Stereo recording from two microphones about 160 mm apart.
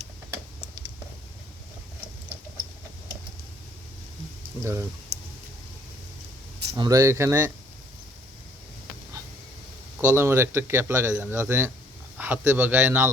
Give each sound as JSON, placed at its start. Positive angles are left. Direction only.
{"t": 4.6, "sound": "speech", "side_deg": -15}
{"t": 6.7, "sound": "speech", "side_deg": -20}
{"t": 10.2, "sound": "speech", "side_deg": -15}